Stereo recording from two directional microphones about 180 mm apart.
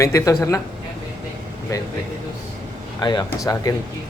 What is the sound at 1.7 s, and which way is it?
Speech, 20° left (ahead or behind).